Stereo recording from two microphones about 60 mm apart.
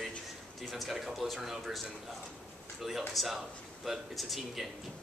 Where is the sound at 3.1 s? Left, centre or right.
Centre.